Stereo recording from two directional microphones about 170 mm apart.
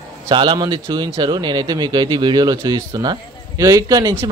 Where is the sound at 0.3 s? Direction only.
30° right (ahead or behind).